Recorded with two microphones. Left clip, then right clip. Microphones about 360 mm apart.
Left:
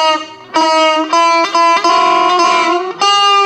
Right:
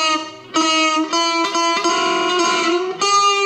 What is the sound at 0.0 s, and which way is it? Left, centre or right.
Music, centre.